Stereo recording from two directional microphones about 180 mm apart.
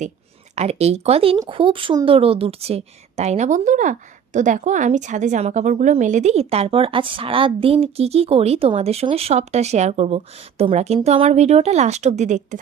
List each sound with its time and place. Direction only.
0.5 s a woman's voice: 35° right (ahead or behind)